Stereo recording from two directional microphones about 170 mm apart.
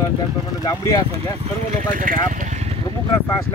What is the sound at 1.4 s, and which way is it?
Speech, 50° right (ahead or behind).